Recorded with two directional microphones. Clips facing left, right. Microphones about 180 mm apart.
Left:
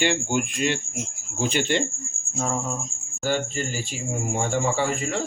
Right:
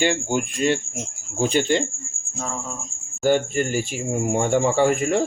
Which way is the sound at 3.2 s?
55° right (ahead or behind).